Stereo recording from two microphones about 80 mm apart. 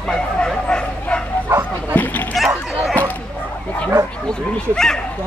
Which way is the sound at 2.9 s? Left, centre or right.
Centre.